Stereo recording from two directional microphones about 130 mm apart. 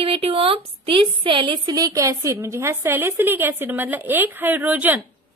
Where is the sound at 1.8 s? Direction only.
25° right (ahead or behind).